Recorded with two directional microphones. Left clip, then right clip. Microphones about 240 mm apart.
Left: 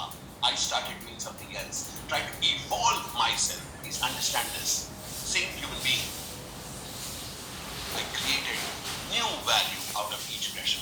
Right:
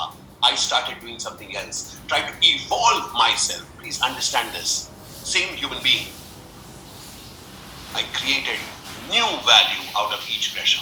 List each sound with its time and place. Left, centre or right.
0.0 s speech: right
7.9 s speech: right